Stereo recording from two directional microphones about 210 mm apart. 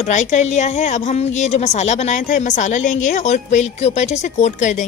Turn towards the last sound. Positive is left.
turn(degrees=35)  # may be behind; listen again after turning